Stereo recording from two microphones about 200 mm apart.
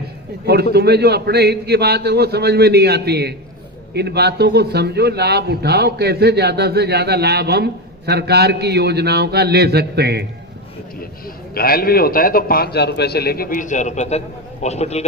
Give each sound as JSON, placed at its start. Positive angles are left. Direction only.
{"t": 0.4, "sound": "a man's voice", "side_deg": -55}
{"t": 11.5, "sound": "a man's voice", "side_deg": 50}